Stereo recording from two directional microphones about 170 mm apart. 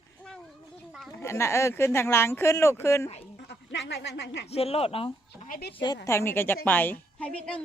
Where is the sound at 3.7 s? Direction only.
90° left.